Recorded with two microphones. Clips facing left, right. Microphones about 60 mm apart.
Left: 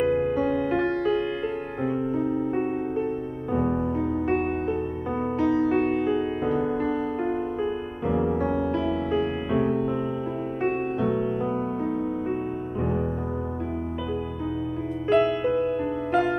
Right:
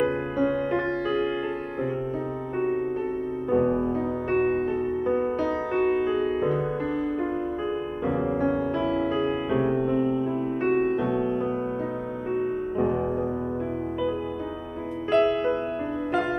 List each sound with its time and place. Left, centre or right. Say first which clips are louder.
0.0 s music: left 2 dB; centre
4.3 s music: right 1 dB; centre
8.4 s music: even; centre
15.0 s music: even; centre